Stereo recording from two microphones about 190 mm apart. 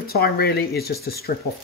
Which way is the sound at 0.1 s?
55° left (ahead or behind).